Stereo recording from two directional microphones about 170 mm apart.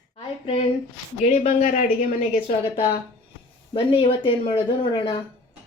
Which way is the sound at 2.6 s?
25° left (ahead or behind).